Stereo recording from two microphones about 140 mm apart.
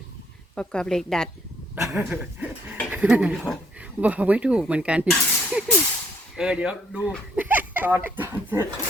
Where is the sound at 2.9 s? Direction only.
10° right (ahead or behind).